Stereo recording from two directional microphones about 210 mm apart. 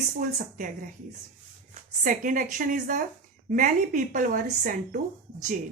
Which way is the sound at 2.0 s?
40° right (ahead or behind).